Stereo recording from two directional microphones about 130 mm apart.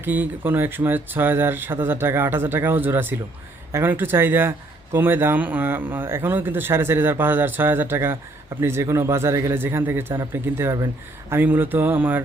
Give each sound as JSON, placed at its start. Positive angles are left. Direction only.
{"t": 0.0, "sound": "speech", "side_deg": -15}